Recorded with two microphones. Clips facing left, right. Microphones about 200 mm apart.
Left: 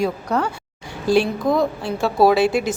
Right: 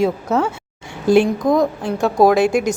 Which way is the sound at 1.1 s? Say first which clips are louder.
Right 4 dB; 20° right (ahead or behind).